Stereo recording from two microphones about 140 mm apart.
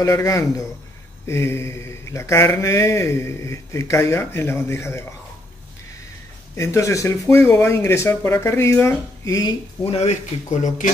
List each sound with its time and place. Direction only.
0.0 s a man's voice: 25° left (ahead or behind)
6.5 s a man's voice: 20° left (ahead or behind)
9.8 s speech: 50° left (ahead or behind)